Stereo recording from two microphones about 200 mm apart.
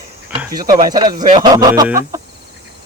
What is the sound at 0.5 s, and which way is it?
Chicken, 20° right (ahead or behind).